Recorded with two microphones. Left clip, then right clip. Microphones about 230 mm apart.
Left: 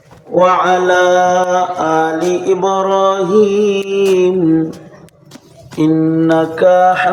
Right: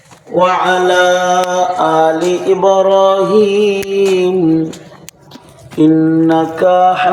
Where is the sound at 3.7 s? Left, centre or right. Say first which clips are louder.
Even; centre.